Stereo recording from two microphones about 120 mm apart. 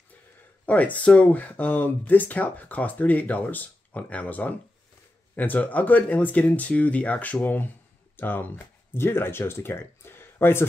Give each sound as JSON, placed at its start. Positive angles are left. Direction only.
{"t": 0.7, "sound": "speech", "side_deg": 10}